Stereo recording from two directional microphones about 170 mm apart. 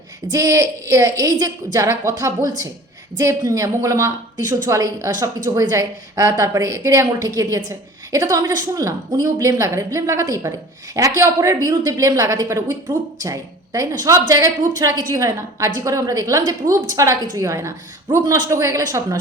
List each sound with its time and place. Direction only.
0.3 s a woman's voice: 20° right (ahead or behind)